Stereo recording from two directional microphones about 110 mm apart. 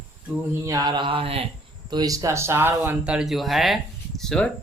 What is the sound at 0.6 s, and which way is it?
Speech, 35° right (ahead or behind).